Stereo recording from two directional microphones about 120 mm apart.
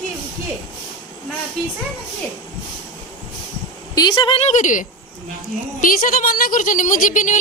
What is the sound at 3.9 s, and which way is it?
Speech, 35° left (ahead or behind).